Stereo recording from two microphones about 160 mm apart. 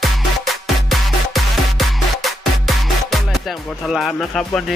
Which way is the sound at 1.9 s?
Centre (ahead or behind).